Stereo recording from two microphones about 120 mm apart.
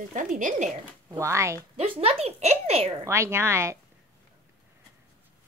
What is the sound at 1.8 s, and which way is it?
Speech, 55° right (ahead or behind).